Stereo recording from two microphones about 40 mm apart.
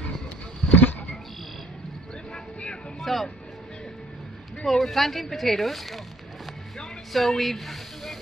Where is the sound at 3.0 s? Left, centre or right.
Centre.